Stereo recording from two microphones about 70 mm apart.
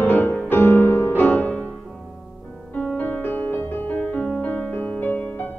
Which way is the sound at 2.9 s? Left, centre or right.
Left.